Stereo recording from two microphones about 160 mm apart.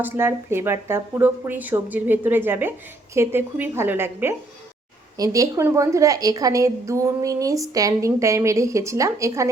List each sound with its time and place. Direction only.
0.0 s a woman's voice: 15° right (ahead or behind)